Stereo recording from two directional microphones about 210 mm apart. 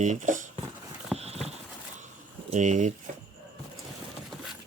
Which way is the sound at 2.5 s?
35° right (ahead or behind).